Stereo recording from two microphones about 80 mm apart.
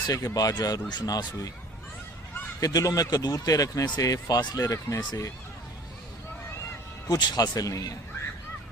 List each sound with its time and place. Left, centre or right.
0.1 s speech: left
2.6 s speech: left
7.1 s speech: left